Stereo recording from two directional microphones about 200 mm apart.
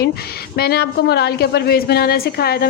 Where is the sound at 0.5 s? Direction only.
50° left (ahead or behind).